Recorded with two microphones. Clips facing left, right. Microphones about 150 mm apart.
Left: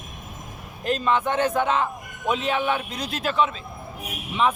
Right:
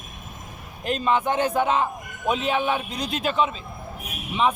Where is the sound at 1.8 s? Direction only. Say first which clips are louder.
Right 1 dB; 5° right (ahead or behind).